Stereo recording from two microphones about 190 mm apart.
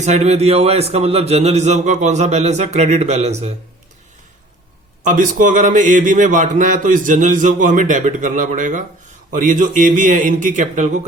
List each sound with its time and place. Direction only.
0.0 s a man's voice: 35° right (ahead or behind)
5.0 s speech: 45° right (ahead or behind)